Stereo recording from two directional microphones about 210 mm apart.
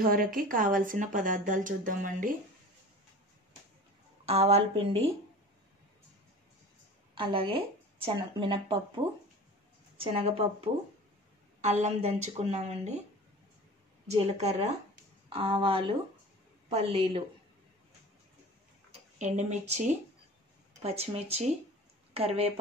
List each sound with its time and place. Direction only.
0.0 s speech: 40° right (ahead or behind)
4.3 s speech: 30° right (ahead or behind)
7.2 s speech: 25° right (ahead or behind)
14.0 s speech: 30° right (ahead or behind)
19.1 s speech: 35° right (ahead or behind)